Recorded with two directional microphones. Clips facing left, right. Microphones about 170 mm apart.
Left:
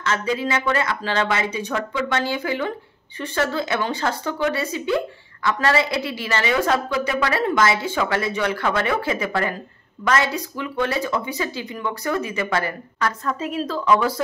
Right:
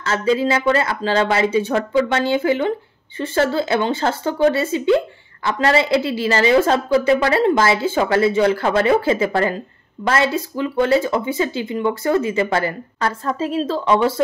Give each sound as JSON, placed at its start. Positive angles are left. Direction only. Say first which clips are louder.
{"t": 0.0, "sound": "speech", "louder": "right 5 dB", "side_deg": -30}